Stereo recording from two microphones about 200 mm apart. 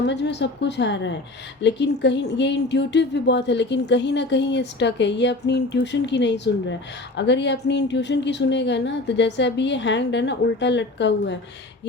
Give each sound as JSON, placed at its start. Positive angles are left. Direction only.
{"t": 0.0, "sound": "a woman's voice", "side_deg": 60}